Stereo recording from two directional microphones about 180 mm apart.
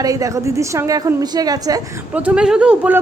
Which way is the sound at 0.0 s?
20° right (ahead or behind).